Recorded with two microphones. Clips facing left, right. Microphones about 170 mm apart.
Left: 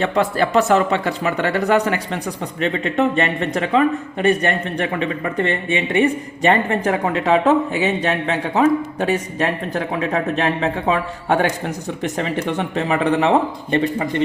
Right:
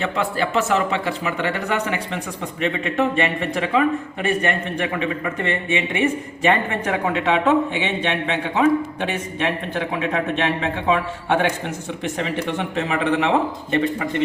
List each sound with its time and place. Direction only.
0.0 s speech: 40° left (ahead or behind)